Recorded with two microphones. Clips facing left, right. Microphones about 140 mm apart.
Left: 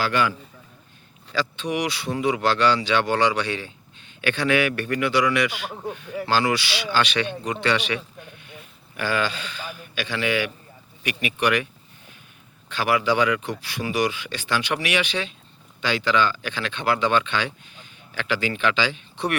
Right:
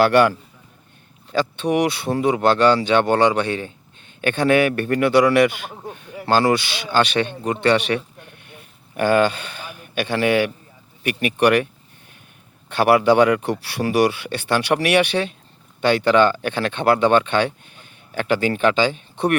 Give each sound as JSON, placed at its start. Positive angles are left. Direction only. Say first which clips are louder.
{"t": 0.0, "sound": "a man's voice", "louder": "right 8 dB", "side_deg": -60}
{"t": 2.1, "sound": "speech", "louder": "right 4 dB", "side_deg": -45}
{"t": 8.4, "sound": "a sound", "louder": "left 1 dB", "side_deg": -50}
{"t": 11.0, "sound": "speech", "louder": "right 6 dB", "side_deg": -50}